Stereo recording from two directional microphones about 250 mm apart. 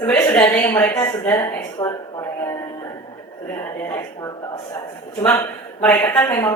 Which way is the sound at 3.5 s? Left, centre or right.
Centre.